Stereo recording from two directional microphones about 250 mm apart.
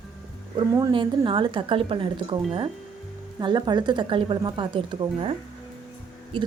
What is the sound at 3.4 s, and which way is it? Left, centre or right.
A woman's voice, centre.